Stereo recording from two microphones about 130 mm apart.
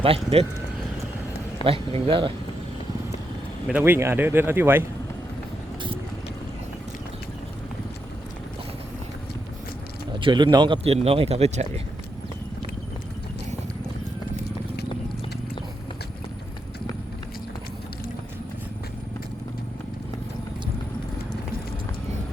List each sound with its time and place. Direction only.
0.0 s speech: 45° right (ahead or behind)
1.6 s speech: 45° right (ahead or behind)
3.7 s speech: 15° right (ahead or behind)
10.2 s speech: 40° right (ahead or behind)
10.8 s speech: 50° right (ahead or behind)